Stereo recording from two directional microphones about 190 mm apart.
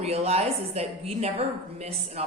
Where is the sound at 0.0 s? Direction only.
35° right (ahead or behind).